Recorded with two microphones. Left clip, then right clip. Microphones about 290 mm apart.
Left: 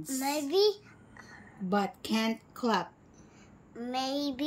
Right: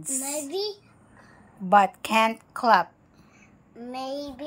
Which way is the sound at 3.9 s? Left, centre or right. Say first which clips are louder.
Even; centre.